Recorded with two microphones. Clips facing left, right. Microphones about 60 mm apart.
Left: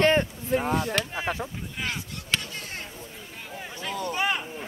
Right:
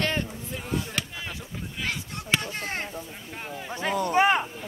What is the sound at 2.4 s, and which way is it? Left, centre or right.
Speech, right.